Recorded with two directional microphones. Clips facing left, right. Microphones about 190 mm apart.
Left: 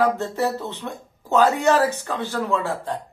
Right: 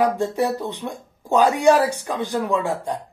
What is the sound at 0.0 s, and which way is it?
Speech, 15° right (ahead or behind).